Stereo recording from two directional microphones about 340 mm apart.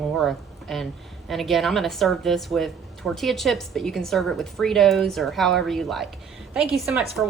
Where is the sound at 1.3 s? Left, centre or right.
Centre.